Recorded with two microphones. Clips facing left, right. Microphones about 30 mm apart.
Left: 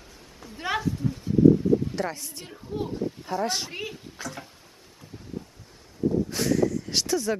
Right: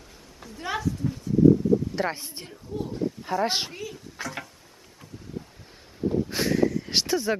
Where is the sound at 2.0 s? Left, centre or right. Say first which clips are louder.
Right 3 dB; right.